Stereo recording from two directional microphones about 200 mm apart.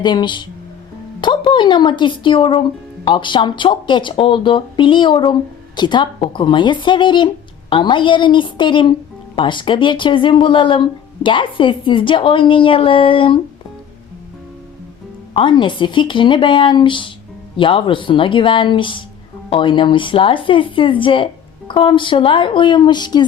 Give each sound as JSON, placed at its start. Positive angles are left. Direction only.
{"t": 0.0, "sound": "speech", "side_deg": 20}
{"t": 15.3, "sound": "speech", "side_deg": 25}